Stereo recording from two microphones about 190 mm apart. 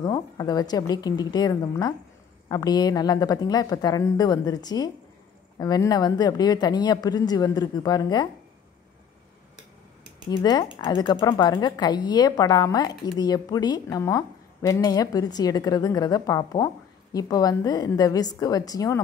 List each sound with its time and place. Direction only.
0.0 s a woman's voice: 20° left (ahead or behind)
10.3 s a woman's voice: 20° left (ahead or behind)